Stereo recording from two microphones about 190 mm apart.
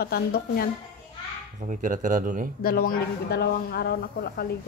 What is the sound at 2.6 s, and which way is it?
Speech, 50° left (ahead or behind).